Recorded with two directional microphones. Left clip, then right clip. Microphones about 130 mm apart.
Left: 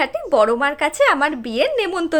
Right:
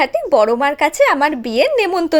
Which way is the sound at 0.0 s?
35° right (ahead or behind).